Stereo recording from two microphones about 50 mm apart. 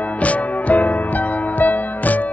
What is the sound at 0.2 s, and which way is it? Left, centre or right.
Music, left.